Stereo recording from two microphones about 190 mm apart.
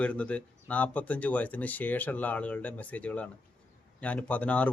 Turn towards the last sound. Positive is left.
turn(degrees=5)  # may be behind; listen again after turning